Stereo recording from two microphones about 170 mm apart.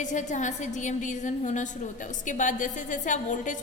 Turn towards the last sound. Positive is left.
turn(degrees=50)  # may be behind; listen again after turning